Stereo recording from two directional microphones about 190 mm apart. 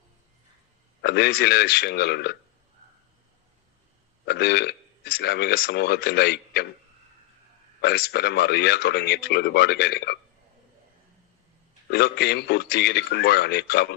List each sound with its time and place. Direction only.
1.0 s speech: 60° left (ahead or behind)
4.3 s speech: 60° left (ahead or behind)
7.8 s speech: 55° left (ahead or behind)
11.9 s speech: 60° left (ahead or behind)